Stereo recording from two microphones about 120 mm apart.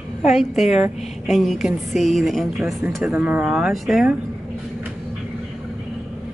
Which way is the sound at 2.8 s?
10° right (ahead or behind).